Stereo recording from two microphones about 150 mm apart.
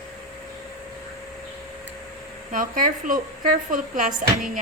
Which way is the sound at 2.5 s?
60° right (ahead or behind).